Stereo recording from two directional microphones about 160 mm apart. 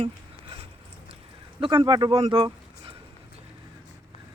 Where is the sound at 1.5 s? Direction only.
30° right (ahead or behind).